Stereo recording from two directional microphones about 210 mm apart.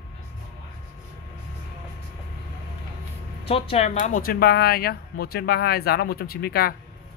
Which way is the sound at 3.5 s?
25° left (ahead or behind).